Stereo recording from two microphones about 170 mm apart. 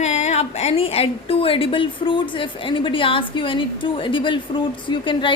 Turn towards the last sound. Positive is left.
turn(degrees=30)  # may be behind; listen again after turning